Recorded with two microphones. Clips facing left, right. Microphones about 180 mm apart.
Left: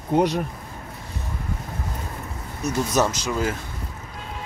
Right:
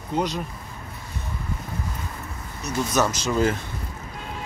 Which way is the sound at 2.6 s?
50° left (ahead or behind).